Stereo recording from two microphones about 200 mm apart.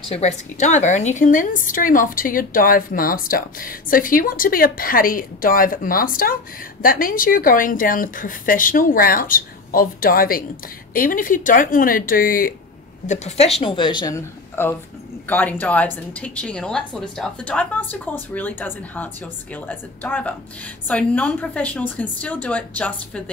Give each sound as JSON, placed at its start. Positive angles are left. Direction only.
{"t": 0.1, "sound": "a woman's voice", "side_deg": 35}